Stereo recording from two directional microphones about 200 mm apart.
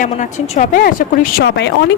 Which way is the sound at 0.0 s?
35° left (ahead or behind).